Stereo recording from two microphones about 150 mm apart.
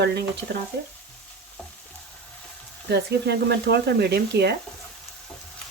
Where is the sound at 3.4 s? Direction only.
90° right.